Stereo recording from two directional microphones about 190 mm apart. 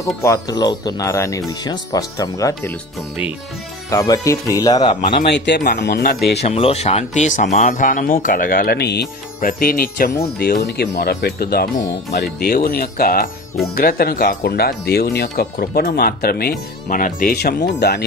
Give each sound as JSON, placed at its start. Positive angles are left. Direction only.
{"t": 0.2, "sound": "speech", "side_deg": 15}
{"t": 3.9, "sound": "speech", "side_deg": 15}
{"t": 5.2, "sound": "speech", "side_deg": 65}
{"t": 6.4, "sound": "speech", "side_deg": 30}
{"t": 9.4, "sound": "speech", "side_deg": 50}